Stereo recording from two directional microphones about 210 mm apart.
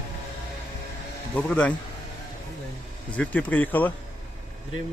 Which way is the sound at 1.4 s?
5° left (ahead or behind).